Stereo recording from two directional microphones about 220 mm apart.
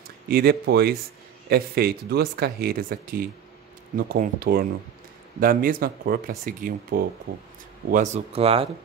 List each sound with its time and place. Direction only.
0.3 s speech: 45° right (ahead or behind); by 8.6 s 25° right (ahead or behind)